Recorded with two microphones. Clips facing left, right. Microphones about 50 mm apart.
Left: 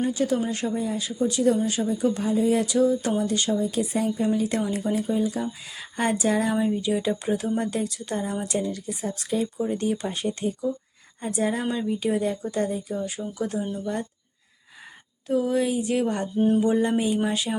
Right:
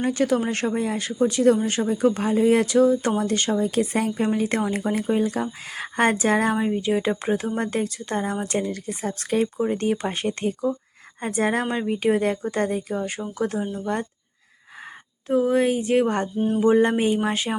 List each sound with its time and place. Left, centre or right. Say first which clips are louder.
0.0 s speech: right 2 dB; right
15.3 s speech: right 3 dB; right